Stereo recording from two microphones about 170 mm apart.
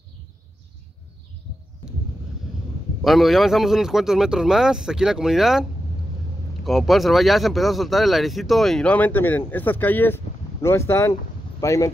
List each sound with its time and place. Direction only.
3.0 s speech: centre (ahead or behind); by 11.9 s 20° left (ahead or behind)